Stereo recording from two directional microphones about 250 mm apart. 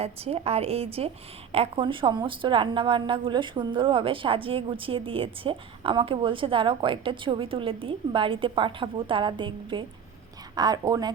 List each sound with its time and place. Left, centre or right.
0.0 s a woman's voice: right